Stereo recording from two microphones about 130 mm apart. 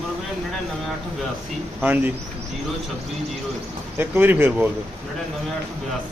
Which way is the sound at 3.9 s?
15° right (ahead or behind).